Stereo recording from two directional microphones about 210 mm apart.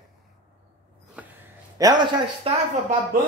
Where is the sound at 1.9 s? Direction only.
20° right (ahead or behind).